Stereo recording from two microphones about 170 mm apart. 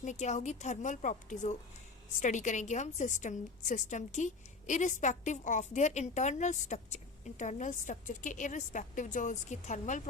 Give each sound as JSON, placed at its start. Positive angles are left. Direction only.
{"t": 0.0, "sound": "a woman's voice", "side_deg": 45}